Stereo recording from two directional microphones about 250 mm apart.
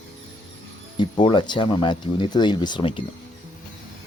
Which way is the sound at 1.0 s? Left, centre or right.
Centre.